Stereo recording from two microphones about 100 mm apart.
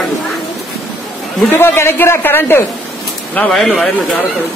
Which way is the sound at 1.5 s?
25° left (ahead or behind).